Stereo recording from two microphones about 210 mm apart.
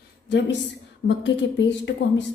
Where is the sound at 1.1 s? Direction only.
60° left (ahead or behind).